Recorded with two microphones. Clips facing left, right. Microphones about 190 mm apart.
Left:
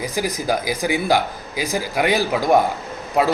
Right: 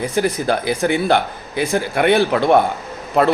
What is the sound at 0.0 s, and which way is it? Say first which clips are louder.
A man's voice: right 5 dB; 5° left (ahead or behind).